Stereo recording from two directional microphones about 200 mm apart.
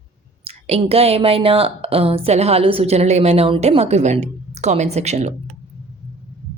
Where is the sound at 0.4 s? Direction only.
30° right (ahead or behind).